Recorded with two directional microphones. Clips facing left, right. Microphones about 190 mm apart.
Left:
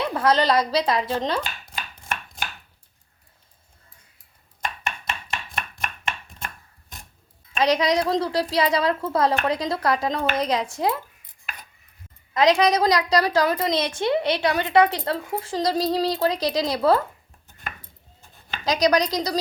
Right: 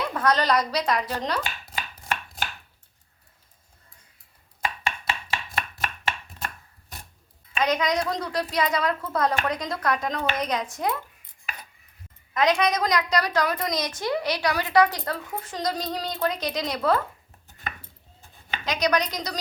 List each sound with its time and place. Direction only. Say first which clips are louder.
0.0 s a woman's voice: left 3 dB; 30° left (ahead or behind)
4.6 s chopping: right 1 dB; 5° right (ahead or behind)
7.6 s a woman's voice: left 4 dB; 30° left (ahead or behind)
12.3 s a woman's voice: left 4 dB; 30° left (ahead or behind)
18.6 s speech: left 5 dB; 35° left (ahead or behind)